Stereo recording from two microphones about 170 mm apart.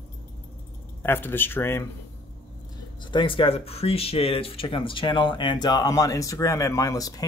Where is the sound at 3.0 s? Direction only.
30° left (ahead or behind).